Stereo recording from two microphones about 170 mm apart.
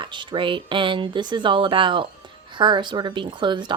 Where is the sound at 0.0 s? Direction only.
30° right (ahead or behind).